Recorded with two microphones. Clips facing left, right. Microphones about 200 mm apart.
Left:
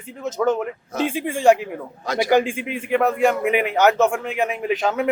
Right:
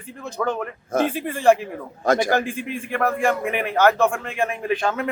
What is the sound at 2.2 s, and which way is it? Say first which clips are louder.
A man's voice: left 4 dB; 15° left (ahead or behind).